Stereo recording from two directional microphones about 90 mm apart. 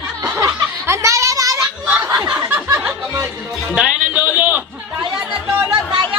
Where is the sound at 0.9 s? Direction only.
35° right (ahead or behind).